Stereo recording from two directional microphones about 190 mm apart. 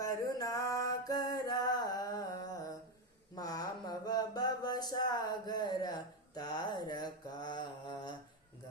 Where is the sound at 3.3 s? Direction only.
20° left (ahead or behind).